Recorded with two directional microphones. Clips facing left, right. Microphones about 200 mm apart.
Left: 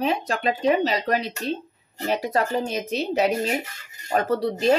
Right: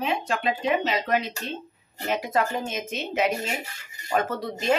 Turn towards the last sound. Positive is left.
turn(degrees=35)  # may be behind; listen again after turning